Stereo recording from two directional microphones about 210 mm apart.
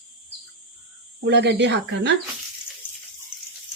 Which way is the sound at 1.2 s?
55° right (ahead or behind).